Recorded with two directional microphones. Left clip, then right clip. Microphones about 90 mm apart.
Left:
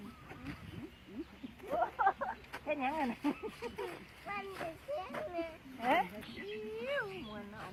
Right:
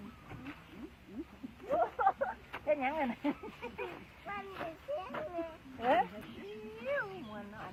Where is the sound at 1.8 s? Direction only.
10° left (ahead or behind).